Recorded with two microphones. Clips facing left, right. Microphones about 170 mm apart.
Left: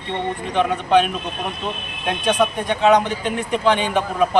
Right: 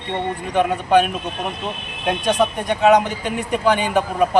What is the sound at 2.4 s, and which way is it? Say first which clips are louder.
Speech: right 1 dB; 10° right (ahead or behind).